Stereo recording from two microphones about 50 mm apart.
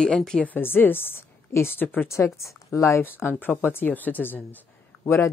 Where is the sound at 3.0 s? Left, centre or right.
Left.